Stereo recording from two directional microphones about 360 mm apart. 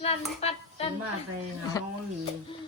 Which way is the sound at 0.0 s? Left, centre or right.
Centre.